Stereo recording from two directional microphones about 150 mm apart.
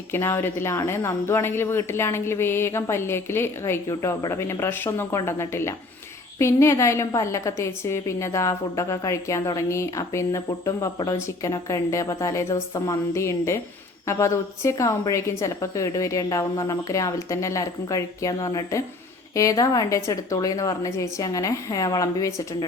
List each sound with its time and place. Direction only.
0.1 s a woman's voice: 15° left (ahead or behind)